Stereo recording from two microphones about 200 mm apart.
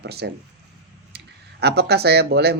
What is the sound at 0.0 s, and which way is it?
Speech, 55° right (ahead or behind).